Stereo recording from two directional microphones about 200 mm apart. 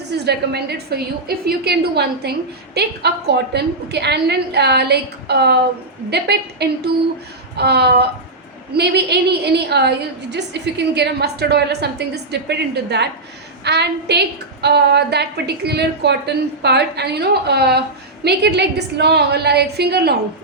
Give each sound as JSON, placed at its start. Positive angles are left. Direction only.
{"t": 0.1, "sound": "a woman's voice", "side_deg": -55}